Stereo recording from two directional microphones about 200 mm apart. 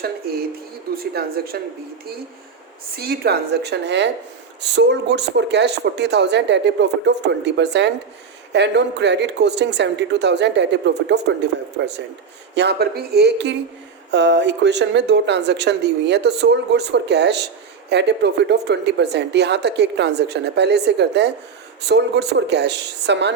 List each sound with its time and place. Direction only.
0.0 s a woman's voice: 50° right (ahead or behind)
2.9 s a woman's voice: 50° right (ahead or behind)